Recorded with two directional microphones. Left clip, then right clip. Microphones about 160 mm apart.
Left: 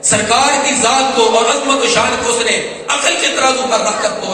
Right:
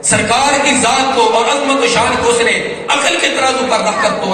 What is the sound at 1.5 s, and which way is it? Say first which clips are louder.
A man's voice: right 1 dB; 15° left (ahead or behind).